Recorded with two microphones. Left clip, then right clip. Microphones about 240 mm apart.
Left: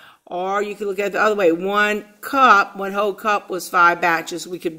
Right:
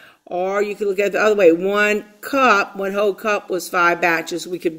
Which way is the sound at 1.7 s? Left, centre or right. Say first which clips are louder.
Right 1 dB; left.